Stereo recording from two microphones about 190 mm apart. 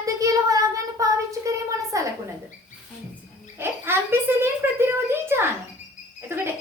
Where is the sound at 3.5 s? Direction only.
10° right (ahead or behind).